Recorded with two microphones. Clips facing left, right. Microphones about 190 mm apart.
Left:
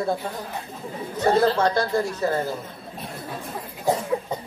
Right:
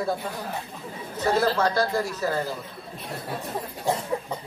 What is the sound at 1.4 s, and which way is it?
Speech, 30° left (ahead or behind).